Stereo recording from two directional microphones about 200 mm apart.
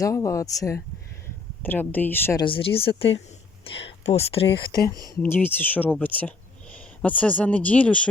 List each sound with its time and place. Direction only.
0.0 s speech: 15° left (ahead or behind)
2.4 s speech: 25° left (ahead or behind); by 8.0 s 5° left (ahead or behind)